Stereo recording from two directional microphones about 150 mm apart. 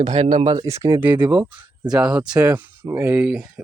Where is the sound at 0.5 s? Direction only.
20° right (ahead or behind).